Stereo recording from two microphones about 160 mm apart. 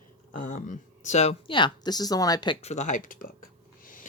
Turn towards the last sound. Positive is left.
turn(degrees=60)  # may be behind; listen again after turning